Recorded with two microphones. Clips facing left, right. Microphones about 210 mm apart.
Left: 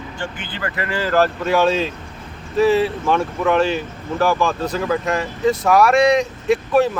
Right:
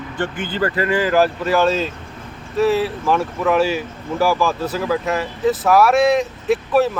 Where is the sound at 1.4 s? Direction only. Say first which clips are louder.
Even; centre (ahead or behind).